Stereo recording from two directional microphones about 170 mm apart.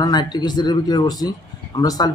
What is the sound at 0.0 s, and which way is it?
Speech, 25° left (ahead or behind).